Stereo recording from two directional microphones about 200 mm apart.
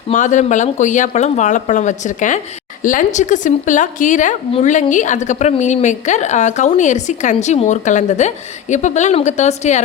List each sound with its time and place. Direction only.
0.1 s a woman's voice: 40° left (ahead or behind)